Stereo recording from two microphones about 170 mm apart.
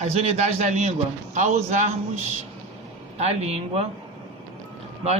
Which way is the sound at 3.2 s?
40° right (ahead or behind).